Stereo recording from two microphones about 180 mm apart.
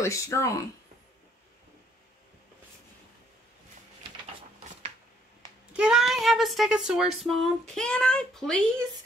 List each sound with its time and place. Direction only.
0.0 s speech: 15° left (ahead or behind)
5.7 s speech: 5° right (ahead or behind)